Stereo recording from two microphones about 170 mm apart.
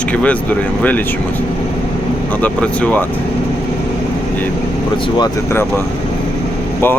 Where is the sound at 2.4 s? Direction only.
10° left (ahead or behind).